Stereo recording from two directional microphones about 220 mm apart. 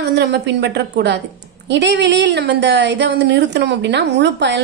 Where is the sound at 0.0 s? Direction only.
50° right (ahead or behind).